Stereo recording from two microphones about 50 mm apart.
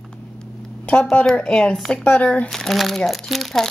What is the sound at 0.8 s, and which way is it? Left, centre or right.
Speech, left.